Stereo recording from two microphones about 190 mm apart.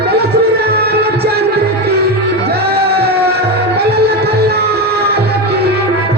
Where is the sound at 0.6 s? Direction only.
55° right (ahead or behind).